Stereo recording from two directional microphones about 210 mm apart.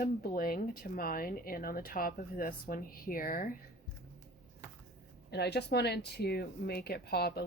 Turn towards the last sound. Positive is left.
turn(degrees=50)  # may be behind; listen again after turning